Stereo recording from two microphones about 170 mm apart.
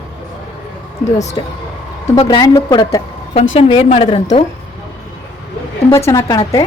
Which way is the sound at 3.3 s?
35° left (ahead or behind).